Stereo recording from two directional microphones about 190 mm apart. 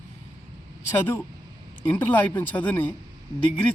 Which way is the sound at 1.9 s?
10° left (ahead or behind).